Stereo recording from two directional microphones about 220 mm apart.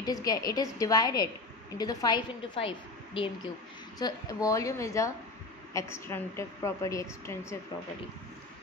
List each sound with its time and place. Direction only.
0.0 s a woman's voice: 15° left (ahead or behind)
4.0 s a woman's voice: 15° left (ahead or behind)